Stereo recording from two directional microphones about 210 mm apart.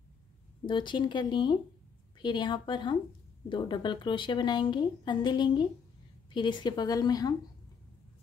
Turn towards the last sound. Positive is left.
turn(degrees=20)  # may be behind; listen again after turning